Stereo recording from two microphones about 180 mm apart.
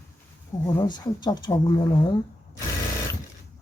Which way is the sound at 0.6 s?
20° left (ahead or behind).